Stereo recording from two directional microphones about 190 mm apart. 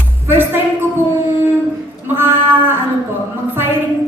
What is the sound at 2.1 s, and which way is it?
Cat, 10° right (ahead or behind).